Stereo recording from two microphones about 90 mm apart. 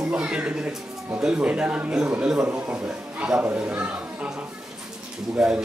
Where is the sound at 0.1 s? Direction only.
15° right (ahead or behind).